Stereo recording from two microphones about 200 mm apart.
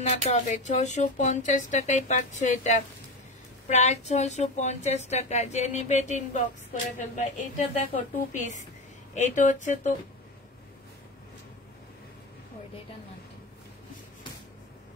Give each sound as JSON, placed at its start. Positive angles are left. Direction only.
{"t": 0.1, "sound": "a woman's voice", "side_deg": 35}